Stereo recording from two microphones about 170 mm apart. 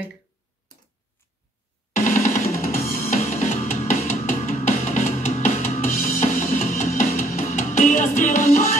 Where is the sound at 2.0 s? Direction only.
50° left (ahead or behind).